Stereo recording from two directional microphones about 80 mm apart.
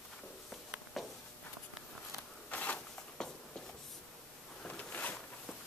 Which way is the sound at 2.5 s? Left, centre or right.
Centre.